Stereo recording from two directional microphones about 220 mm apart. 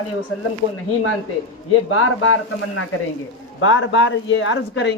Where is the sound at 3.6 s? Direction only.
60° left (ahead or behind).